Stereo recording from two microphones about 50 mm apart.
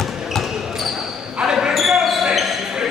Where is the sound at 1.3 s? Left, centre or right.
Centre.